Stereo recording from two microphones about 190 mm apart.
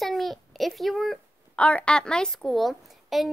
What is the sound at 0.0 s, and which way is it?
A child's voice, centre (ahead or behind).